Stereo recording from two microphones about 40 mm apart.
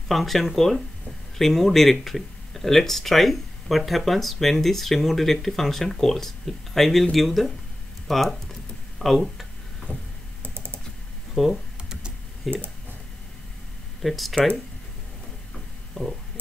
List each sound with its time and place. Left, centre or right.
0.1 s speech: centre
9.9 s a sound: right
10.4 s typing: right
11.3 s computer keyboard: centre
12.4 s speech: centre
14.0 s speech: centre
15.5 s a sound: centre